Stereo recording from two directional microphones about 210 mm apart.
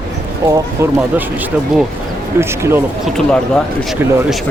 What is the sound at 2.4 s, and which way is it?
Speech, 10° right (ahead or behind).